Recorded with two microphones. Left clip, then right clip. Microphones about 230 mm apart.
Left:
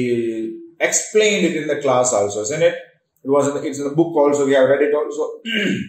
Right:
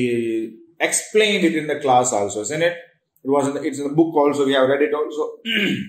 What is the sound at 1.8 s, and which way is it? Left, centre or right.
Speech, right.